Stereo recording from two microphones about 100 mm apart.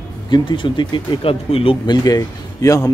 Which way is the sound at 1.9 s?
40° left (ahead or behind).